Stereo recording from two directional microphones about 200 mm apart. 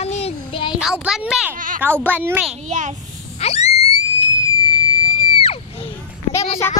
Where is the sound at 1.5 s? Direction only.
40° right (ahead or behind).